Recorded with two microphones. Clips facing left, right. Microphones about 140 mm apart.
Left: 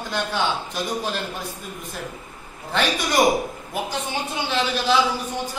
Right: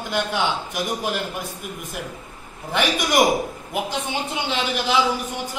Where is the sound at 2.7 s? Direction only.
15° right (ahead or behind).